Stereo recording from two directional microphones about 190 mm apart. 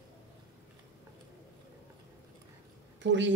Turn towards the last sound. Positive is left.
turn(degrees=-70)  # may be behind; listen again after turning